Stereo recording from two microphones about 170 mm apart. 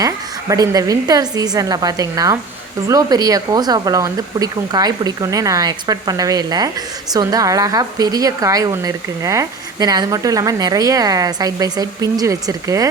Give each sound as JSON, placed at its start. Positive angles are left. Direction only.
{"t": 0.0, "sound": "a woman's voice", "side_deg": -20}